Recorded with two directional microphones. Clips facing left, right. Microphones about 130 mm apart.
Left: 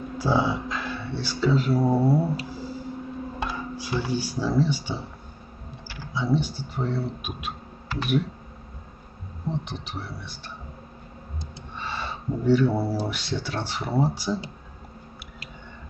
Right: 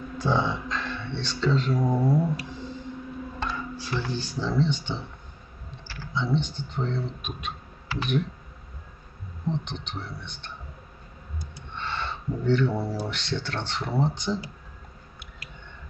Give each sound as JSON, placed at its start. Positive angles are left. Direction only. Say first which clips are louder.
{"t": 0.2, "sound": "speech", "louder": "left 2 dB", "side_deg": 5}
{"t": 1.8, "sound": "mantra", "louder": "left 3 dB", "side_deg": 30}
{"t": 3.3, "sound": "speech", "louder": "even", "side_deg": 10}
{"t": 9.7, "sound": "speech", "louder": "left 1 dB", "side_deg": 5}
{"t": 11.7, "sound": "a sound", "louder": "even", "side_deg": 10}
{"t": 13.0, "sound": "speech", "louder": "left 2 dB", "side_deg": 10}